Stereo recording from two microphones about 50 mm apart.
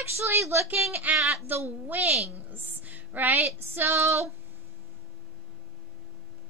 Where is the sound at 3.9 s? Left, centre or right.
Right.